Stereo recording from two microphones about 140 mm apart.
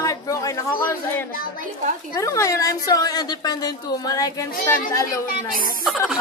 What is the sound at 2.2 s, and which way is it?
A woman's voice, 25° left (ahead or behind).